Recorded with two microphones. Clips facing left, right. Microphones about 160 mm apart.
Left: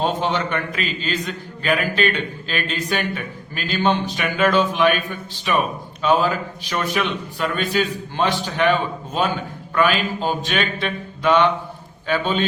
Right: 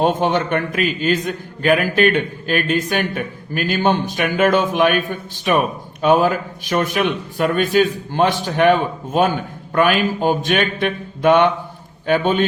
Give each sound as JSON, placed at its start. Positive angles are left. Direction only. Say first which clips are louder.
{"t": 0.0, "sound": "a man's voice", "louder": "right 4 dB", "side_deg": -50}